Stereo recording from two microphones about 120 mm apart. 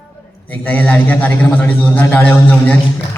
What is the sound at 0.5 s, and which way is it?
A man's voice, 15° left (ahead or behind).